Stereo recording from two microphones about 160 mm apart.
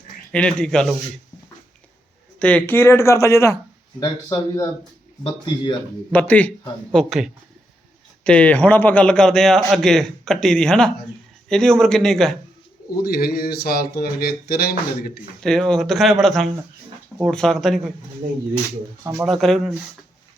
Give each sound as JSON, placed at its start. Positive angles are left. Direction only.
{"t": 0.3, "sound": "a man's voice", "side_deg": 5}
{"t": 2.4, "sound": "speech", "side_deg": 10}
{"t": 6.1, "sound": "speech", "side_deg": 10}
{"t": 6.9, "sound": "a man's voice", "side_deg": 0}
{"t": 13.1, "sound": "a sound", "side_deg": 70}
{"t": 15.4, "sound": "a man's voice", "side_deg": 5}
{"t": 19.2, "sound": "a man's voice", "side_deg": 0}